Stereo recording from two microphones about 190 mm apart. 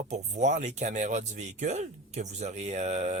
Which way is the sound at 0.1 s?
40° right (ahead or behind).